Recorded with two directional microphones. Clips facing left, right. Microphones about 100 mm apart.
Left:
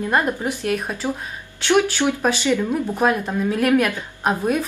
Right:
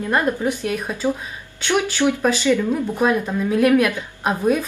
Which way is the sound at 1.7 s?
15° left (ahead or behind).